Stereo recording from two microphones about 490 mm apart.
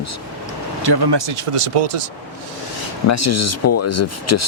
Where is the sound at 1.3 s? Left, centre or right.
Right.